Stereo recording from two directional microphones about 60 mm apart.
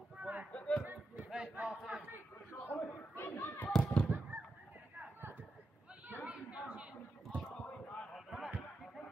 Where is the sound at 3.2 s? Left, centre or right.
Left.